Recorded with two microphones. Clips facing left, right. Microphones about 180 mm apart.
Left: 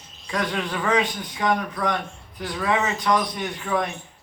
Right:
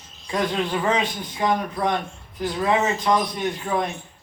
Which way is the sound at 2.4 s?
25° right (ahead or behind).